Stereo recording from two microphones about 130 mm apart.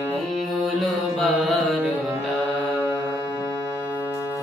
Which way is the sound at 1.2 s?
Centre (ahead or behind).